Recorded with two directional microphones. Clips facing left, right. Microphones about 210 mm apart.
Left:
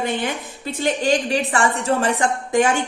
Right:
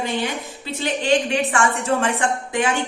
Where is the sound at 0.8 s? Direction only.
40° left (ahead or behind).